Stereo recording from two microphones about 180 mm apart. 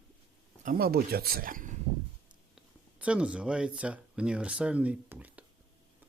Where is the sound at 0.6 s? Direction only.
55° right (ahead or behind).